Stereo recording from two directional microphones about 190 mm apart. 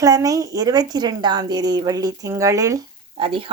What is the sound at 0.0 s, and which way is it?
A woman's voice, 15° right (ahead or behind).